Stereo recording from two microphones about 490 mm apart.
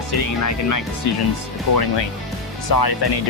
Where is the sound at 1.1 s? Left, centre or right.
Left.